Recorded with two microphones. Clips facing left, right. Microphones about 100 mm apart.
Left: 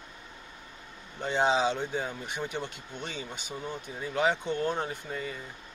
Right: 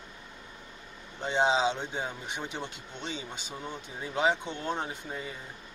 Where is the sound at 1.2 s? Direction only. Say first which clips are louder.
Even; 20° right (ahead or behind).